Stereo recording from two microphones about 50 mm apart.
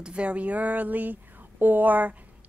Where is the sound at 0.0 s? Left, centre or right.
Right.